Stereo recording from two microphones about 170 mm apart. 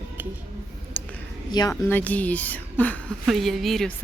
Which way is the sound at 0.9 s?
10° left (ahead or behind).